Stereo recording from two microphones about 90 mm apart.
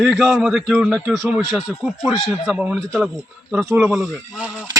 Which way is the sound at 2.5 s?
15° right (ahead or behind).